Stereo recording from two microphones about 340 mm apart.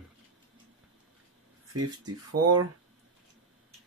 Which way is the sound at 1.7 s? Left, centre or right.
Right.